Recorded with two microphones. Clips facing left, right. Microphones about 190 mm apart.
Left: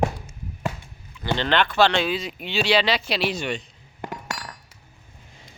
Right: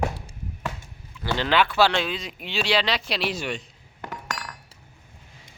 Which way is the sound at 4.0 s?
20° left (ahead or behind).